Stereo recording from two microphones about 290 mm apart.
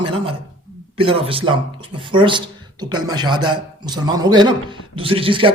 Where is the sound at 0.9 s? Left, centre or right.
Centre.